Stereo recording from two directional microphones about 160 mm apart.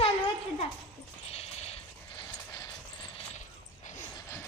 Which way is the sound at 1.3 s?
40° left (ahead or behind).